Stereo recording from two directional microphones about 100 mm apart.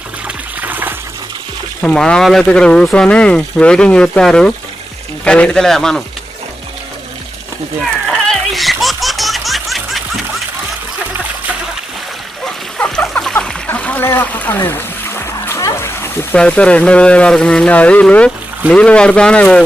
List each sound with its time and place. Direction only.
0.6 s water: 20° right (ahead or behind)
1.8 s speech: 10° left (ahead or behind)
8.3 s baby laughter: centre (ahead or behind)
12.8 s splash: 10° left (ahead or behind)
13.7 s a sound: 20° left (ahead or behind)
16.3 s speech: 10° left (ahead or behind)